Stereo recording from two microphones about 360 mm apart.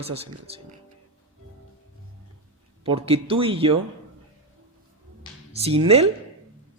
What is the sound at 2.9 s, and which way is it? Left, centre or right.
Speech, centre.